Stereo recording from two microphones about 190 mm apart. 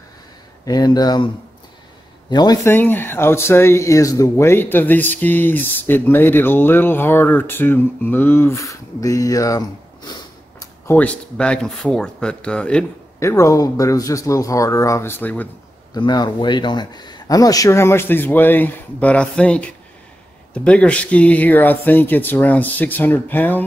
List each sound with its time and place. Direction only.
0.7 s speech: 20° left (ahead or behind)
2.7 s speech: 10° left (ahead or behind)
15.9 s speech: 20° left (ahead or behind)